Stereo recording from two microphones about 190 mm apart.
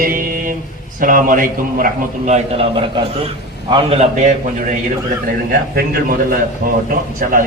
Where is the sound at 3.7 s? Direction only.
30° right (ahead or behind).